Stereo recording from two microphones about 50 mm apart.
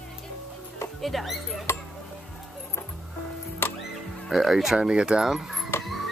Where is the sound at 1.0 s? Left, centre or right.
Centre.